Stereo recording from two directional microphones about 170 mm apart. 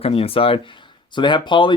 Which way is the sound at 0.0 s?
35° left (ahead or behind).